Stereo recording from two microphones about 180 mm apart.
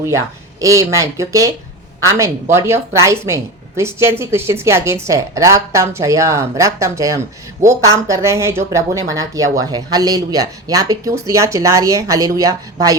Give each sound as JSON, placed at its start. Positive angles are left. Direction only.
{"t": 0.6, "sound": "speech", "side_deg": -20}